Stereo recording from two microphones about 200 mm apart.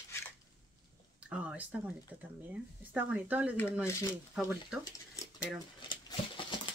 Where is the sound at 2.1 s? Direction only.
10° right (ahead or behind).